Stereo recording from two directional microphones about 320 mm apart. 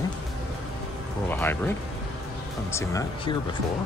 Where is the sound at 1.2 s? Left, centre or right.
Centre.